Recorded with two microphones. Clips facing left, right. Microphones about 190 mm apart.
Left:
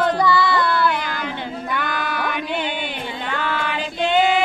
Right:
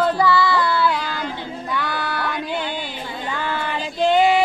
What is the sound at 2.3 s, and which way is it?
Music, 65° left (ahead or behind).